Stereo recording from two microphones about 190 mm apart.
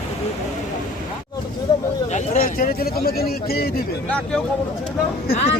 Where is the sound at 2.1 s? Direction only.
45° left (ahead or behind).